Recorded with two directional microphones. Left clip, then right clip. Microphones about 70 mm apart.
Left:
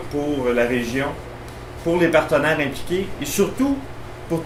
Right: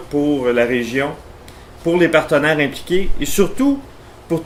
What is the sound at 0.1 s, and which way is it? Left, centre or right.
Speech, right.